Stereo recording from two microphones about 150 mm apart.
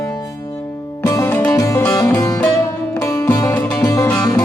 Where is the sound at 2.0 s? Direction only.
10° left (ahead or behind).